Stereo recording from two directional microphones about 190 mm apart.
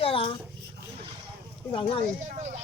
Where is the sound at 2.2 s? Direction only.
40° right (ahead or behind).